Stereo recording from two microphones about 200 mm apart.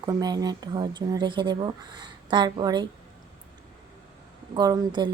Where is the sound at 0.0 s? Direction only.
20° right (ahead or behind).